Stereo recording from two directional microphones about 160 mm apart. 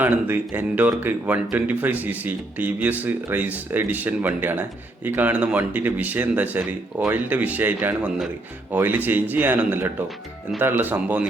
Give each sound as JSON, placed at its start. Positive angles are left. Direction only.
{"t": 0.0, "sound": "speech", "side_deg": -10}